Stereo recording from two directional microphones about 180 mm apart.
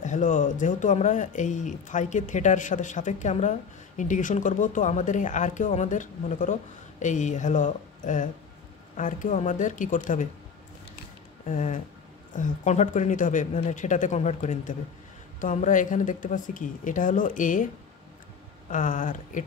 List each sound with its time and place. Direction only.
0.0 s speech: 45° left (ahead or behind)
11.4 s speech: 45° left (ahead or behind)
18.7 s speech: 45° left (ahead or behind)